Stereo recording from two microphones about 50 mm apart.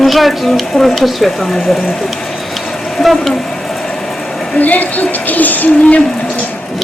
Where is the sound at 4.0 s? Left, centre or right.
Centre.